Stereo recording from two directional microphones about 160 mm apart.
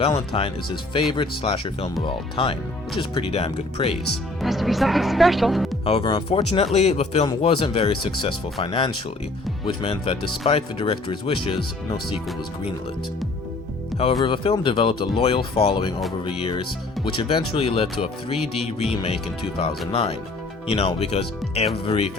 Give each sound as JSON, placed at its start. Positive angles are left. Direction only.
{"t": 0.3, "sound": "speech", "side_deg": 35}
{"t": 4.4, "sound": "speech", "side_deg": 0}
{"t": 5.8, "sound": "speech", "side_deg": 35}
{"t": 14.3, "sound": "speech", "side_deg": 30}